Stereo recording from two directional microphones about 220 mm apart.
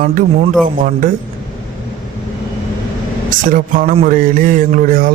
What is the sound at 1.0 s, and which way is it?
Speech, 40° right (ahead or behind).